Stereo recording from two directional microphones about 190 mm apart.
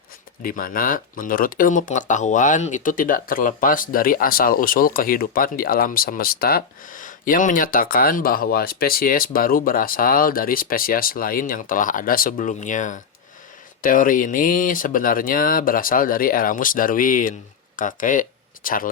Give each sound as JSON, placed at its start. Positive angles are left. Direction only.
{"t": 0.4, "sound": "speech", "side_deg": 50}